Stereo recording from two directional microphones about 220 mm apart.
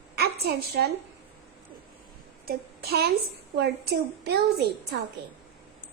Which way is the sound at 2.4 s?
45° right (ahead or behind).